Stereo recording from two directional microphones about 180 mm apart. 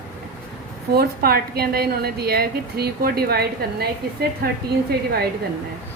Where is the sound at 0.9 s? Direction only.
60° right (ahead or behind).